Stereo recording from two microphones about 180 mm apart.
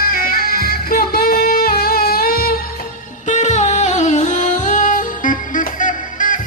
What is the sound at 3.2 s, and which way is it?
Music, 40° left (ahead or behind).